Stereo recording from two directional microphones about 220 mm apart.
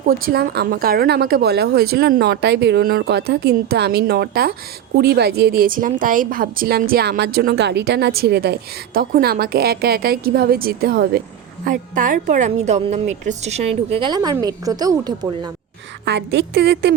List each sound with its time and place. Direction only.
0.0 s a woman's voice: 40° right (ahead or behind); by 15.5 s 20° right (ahead or behind)
16.0 s a woman's voice: 50° right (ahead or behind)